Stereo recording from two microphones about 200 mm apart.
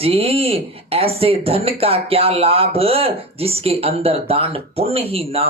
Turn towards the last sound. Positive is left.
turn(degrees=-30)  # may be behind; listen again after turning